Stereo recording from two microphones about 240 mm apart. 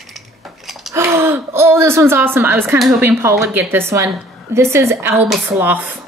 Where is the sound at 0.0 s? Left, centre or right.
Centre.